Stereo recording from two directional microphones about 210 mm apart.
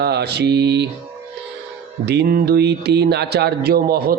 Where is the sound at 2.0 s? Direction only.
50° right (ahead or behind).